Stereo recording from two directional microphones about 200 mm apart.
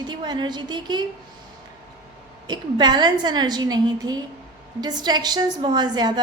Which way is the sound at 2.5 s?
20° right (ahead or behind).